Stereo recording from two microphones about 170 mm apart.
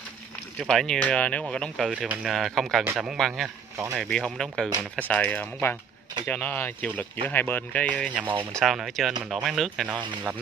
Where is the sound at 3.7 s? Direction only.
15° right (ahead or behind).